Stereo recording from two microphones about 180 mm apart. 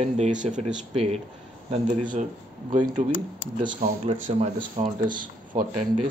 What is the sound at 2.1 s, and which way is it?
Speech, 45° right (ahead or behind).